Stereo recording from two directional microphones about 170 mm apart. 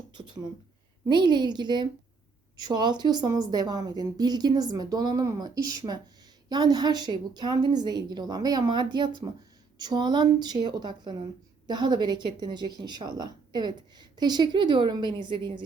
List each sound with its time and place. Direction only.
0.1 s a woman's voice: 25° right (ahead or behind)